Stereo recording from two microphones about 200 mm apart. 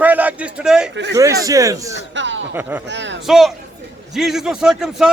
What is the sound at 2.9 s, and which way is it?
Speech, 65° right (ahead or behind).